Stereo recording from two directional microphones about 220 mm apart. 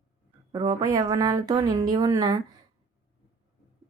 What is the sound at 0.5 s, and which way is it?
A woman's voice, 15° right (ahead or behind).